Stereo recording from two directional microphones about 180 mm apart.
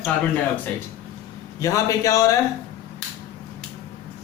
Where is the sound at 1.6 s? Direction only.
20° left (ahead or behind).